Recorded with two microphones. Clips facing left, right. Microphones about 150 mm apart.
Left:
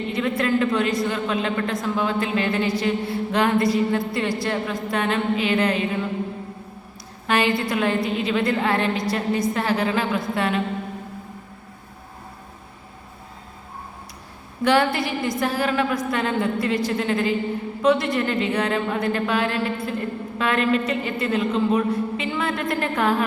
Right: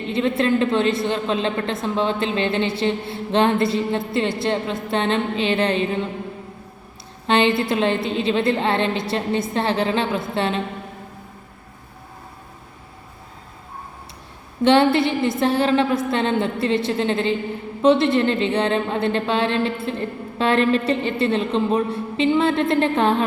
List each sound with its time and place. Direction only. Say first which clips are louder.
0.1 s a woman's voice: right 3 dB; 25° right (ahead or behind)
7.3 s a woman's voice: right 3 dB; 25° right (ahead or behind)
14.6 s a woman's voice: right 4 dB; 25° right (ahead or behind)